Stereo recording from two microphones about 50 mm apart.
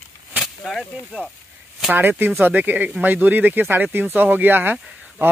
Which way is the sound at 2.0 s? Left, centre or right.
Right.